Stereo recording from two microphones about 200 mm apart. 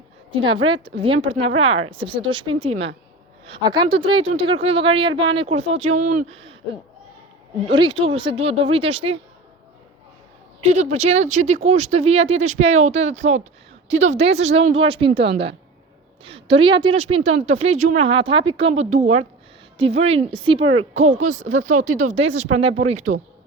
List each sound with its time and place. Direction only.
0.4 s a woman's voice: 25° right (ahead or behind)
7.7 s a woman's voice: 25° right (ahead or behind)
10.6 s a woman's voice: 35° right (ahead or behind)
20.9 s speech: 35° right (ahead or behind)